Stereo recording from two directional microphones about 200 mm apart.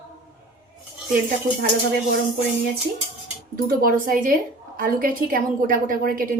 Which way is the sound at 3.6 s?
45° right (ahead or behind).